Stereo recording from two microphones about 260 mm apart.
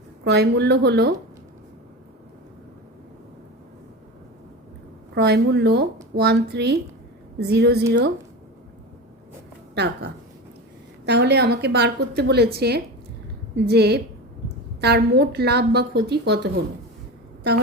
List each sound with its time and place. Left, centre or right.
0.3 s a woman's voice: right
5.1 s a woman's voice: right
9.7 s a woman's voice: right